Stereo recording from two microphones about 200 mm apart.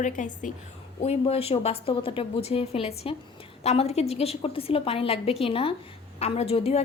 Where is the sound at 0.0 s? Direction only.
40° left (ahead or behind).